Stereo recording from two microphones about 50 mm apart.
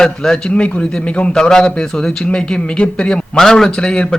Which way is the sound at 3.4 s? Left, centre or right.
Centre.